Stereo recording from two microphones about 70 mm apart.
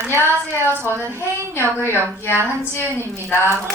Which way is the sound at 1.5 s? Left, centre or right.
Left.